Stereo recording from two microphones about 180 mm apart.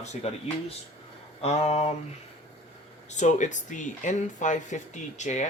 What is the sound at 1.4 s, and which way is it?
Speech, 35° left (ahead or behind).